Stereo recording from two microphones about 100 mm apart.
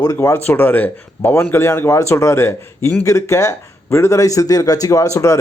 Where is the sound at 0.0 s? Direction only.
30° left (ahead or behind).